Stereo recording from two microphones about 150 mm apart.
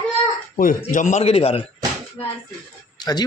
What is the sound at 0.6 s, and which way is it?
A man's voice, 65° left (ahead or behind).